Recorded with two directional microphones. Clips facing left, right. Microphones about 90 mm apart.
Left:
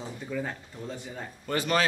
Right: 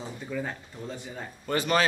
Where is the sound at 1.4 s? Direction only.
25° right (ahead or behind).